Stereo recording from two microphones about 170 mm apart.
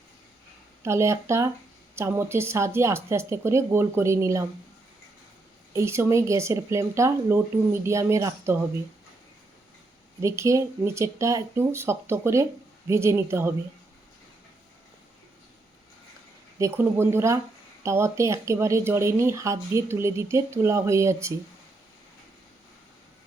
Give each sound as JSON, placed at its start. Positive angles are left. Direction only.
{"t": 0.9, "sound": "speech", "side_deg": -15}
{"t": 5.7, "sound": "speech", "side_deg": -15}
{"t": 10.2, "sound": "speech", "side_deg": -15}
{"t": 16.6, "sound": "speech", "side_deg": -15}